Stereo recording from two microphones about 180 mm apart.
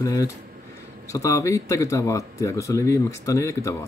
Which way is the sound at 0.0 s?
20° left (ahead or behind).